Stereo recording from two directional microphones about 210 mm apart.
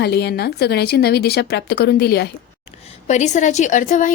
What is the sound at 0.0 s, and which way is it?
A woman's voice, 50° left (ahead or behind).